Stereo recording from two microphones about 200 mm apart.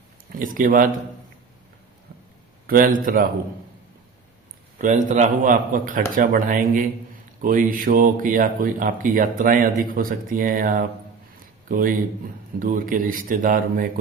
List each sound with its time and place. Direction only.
0.3 s speech: 40° right (ahead or behind)
2.6 s speech: 45° right (ahead or behind)
4.8 s a man's voice: 40° right (ahead or behind)